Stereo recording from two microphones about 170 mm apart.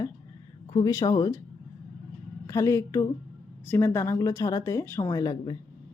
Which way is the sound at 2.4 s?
20° left (ahead or behind).